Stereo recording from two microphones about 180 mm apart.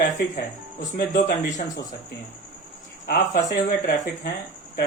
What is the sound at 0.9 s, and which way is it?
Speech, 55° left (ahead or behind).